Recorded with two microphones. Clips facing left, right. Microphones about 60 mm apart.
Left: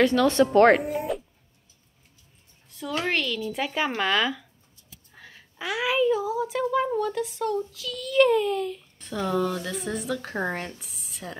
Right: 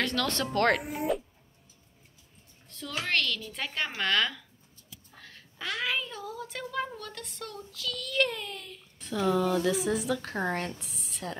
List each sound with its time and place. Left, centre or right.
0.0 s a woman's voice: centre
1.1 s cat: centre
3.0 s a child's voice: centre